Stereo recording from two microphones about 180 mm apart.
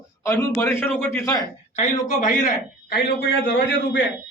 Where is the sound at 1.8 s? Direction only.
45° left (ahead or behind).